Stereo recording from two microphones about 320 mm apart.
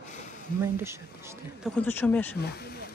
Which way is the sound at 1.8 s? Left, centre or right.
Centre.